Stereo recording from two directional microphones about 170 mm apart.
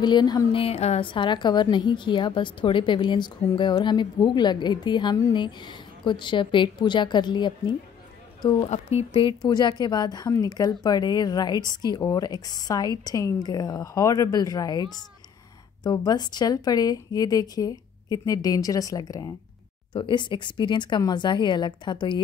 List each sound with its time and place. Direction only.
0.0 s a woman's voice: 25° left (ahead or behind)
8.6 s a woman's voice: 40° left (ahead or behind)